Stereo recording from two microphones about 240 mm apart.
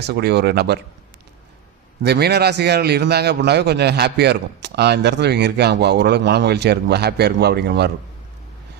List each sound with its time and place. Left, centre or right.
0.1 s a man's voice: right
2.0 s a man's voice: right